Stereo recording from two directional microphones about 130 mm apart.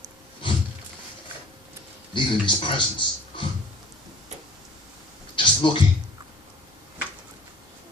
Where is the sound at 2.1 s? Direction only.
40° left (ahead or behind).